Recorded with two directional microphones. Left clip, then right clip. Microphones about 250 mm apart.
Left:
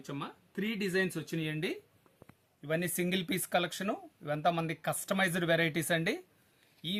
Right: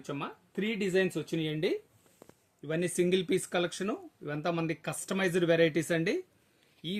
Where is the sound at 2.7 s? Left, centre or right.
Left.